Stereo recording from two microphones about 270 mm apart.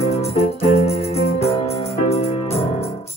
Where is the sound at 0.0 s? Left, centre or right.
Left.